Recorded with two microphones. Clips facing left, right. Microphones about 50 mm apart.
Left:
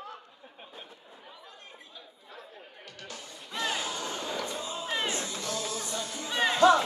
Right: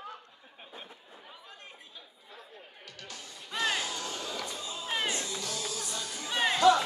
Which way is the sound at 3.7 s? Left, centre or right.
Left.